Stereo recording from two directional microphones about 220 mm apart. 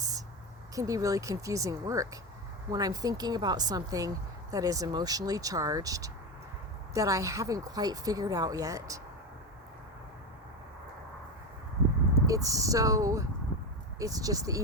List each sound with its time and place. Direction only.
0.8 s a woman's voice: 15° right (ahead or behind)
12.2 s a woman's voice: 15° right (ahead or behind)